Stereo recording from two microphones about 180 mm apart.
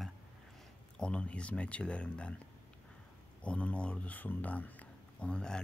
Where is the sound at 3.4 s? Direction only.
5° left (ahead or behind).